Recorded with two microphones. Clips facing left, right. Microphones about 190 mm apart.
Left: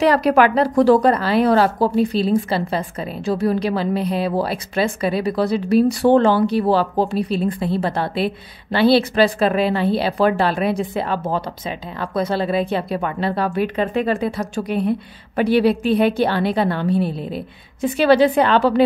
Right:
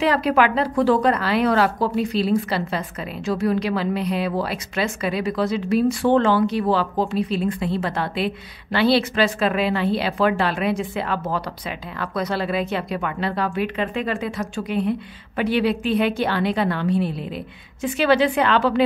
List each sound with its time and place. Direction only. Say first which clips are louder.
0.0 s speech: left 4 dB; 40° left (ahead or behind)